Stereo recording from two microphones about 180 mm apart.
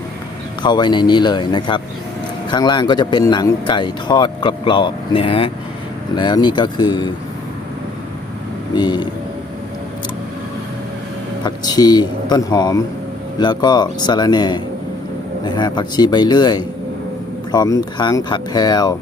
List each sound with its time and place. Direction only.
0.6 s speech: 25° left (ahead or behind)
8.7 s speech: 25° left (ahead or behind)
11.4 s speech: 20° left (ahead or behind)